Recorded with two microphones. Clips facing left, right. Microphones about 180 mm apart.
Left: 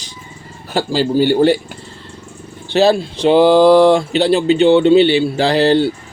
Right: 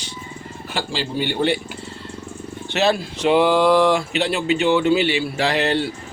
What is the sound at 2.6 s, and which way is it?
Speech, 35° left (ahead or behind).